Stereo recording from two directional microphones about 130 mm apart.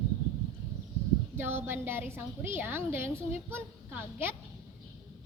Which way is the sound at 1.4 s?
15° right (ahead or behind).